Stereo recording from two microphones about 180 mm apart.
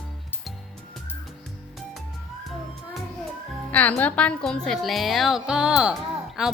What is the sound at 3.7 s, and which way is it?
A woman's voice, 10° left (ahead or behind).